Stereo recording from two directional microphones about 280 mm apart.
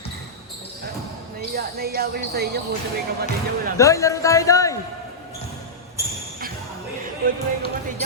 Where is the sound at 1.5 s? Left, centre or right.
Right.